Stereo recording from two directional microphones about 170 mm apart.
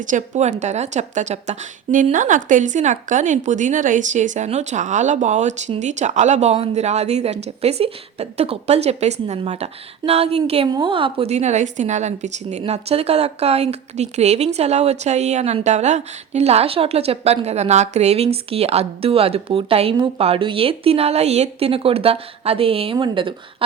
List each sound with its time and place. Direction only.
0.0 s a woman's voice: 50° right (ahead or behind); by 23.6 s 30° right (ahead or behind)